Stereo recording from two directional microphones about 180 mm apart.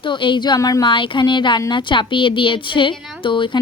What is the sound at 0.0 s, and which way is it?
A woman's voice, 25° left (ahead or behind).